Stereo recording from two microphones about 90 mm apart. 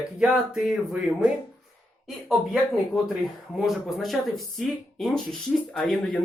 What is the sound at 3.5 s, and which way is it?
A woman's voice, centre (ahead or behind).